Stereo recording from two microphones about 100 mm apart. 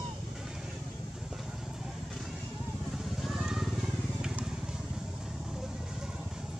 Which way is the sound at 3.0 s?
Centre (ahead or behind).